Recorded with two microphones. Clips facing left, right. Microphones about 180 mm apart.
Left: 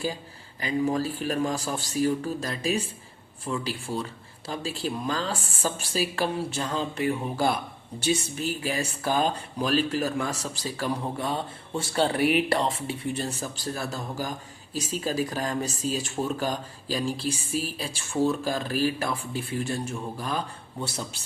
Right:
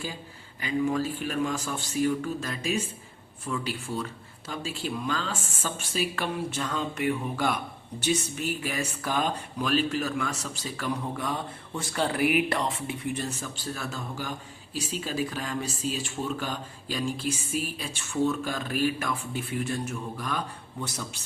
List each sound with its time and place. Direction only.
0.6 s speech: 35° left (ahead or behind)